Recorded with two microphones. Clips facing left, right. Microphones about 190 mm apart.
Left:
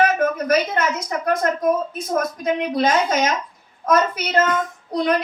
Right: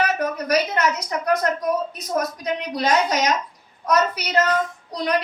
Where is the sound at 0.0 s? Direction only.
50° left (ahead or behind).